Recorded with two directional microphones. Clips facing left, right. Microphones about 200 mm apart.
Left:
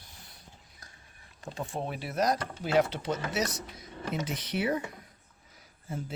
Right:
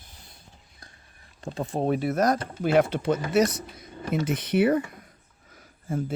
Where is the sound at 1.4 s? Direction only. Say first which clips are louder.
Right 8 dB; 35° right (ahead or behind); by 4.8 s 55° right (ahead or behind).